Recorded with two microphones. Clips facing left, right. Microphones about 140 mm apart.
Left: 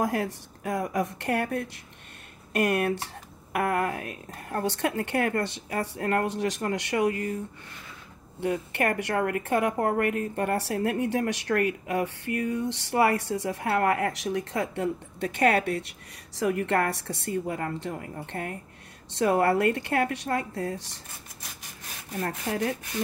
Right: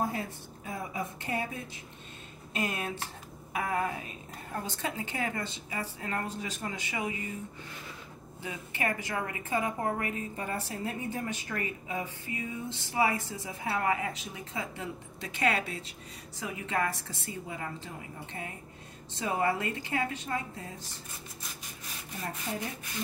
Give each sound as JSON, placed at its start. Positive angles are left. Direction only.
{"t": 0.0, "sound": "a woman's voice", "side_deg": 75}
{"t": 8.4, "sound": "a woman's voice", "side_deg": 65}
{"t": 22.2, "sound": "a woman's voice", "side_deg": 75}